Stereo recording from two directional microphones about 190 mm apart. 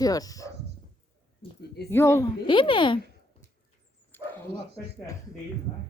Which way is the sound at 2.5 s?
25° left (ahead or behind).